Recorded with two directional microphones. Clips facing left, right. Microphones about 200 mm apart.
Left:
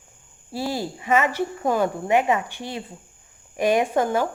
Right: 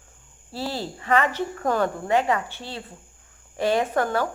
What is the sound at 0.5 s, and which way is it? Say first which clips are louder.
Speech: left 3 dB; 10° left (ahead or behind).